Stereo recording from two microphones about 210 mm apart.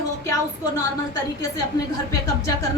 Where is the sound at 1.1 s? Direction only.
20° left (ahead or behind).